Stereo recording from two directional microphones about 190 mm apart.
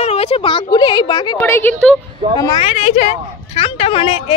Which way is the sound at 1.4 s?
10° left (ahead or behind).